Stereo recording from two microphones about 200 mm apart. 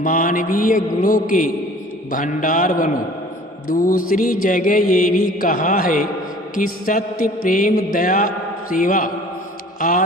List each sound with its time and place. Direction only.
0.0 s mantra: 40° left (ahead or behind)